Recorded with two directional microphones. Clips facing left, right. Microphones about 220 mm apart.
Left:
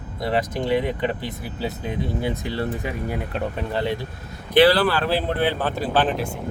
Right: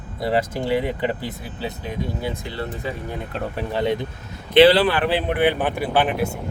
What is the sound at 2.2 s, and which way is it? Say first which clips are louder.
Speech: left 3 dB; 15° left (ahead or behind).